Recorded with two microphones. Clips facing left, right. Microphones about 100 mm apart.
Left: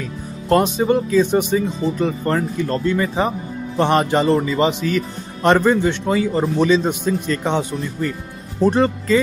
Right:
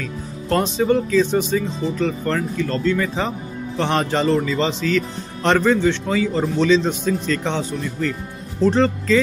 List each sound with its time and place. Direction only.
0.5 s speech: 15° left (ahead or behind)